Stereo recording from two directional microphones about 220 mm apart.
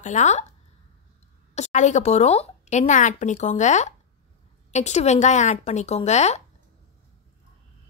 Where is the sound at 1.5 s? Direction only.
30° left (ahead or behind).